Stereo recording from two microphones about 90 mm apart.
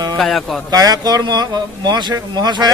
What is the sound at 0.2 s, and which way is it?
Speech, 5° left (ahead or behind).